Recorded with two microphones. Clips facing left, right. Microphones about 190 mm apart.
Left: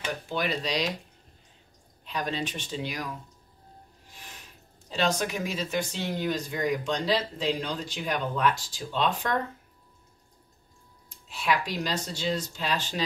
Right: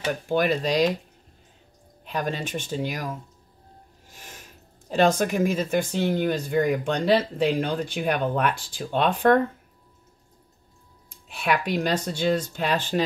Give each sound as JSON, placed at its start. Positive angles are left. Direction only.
{"t": 0.3, "sound": "speech", "side_deg": -50}
{"t": 2.0, "sound": "speech", "side_deg": -50}
{"t": 11.2, "sound": "speech", "side_deg": -55}